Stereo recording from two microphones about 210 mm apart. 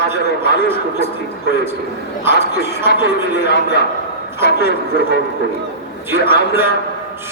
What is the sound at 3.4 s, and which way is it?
A man's voice, 55° left (ahead or behind).